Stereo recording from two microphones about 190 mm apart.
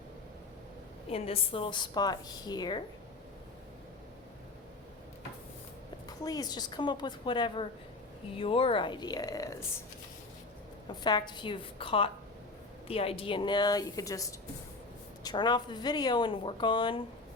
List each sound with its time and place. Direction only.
1.1 s speech: 30° left (ahead or behind)
6.1 s speech: 20° left (ahead or behind)
11.0 s speech: 25° left (ahead or behind)